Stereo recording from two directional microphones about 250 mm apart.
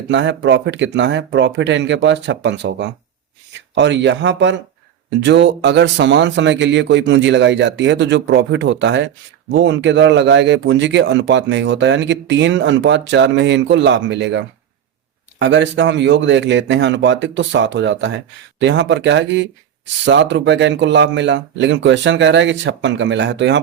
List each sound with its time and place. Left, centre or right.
0.1 s a man's voice: right